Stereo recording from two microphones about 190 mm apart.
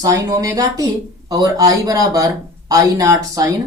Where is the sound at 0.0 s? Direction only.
15° right (ahead or behind).